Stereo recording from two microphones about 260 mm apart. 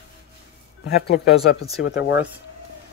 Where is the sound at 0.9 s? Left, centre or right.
Left.